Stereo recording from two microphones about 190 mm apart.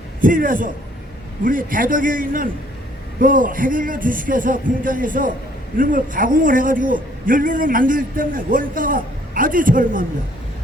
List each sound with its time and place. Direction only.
0.2 s a man's voice: 45° right (ahead or behind)